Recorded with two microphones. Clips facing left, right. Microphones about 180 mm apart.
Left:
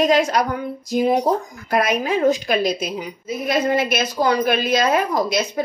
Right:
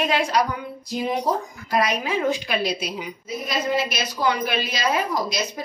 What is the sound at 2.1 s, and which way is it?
Speech, 40° left (ahead or behind).